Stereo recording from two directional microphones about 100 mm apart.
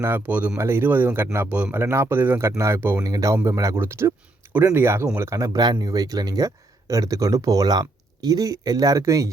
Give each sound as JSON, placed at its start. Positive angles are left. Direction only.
{"t": 0.0, "sound": "speech", "side_deg": -20}
{"t": 0.5, "sound": "speech", "side_deg": -25}
{"t": 1.8, "sound": "speech", "side_deg": -25}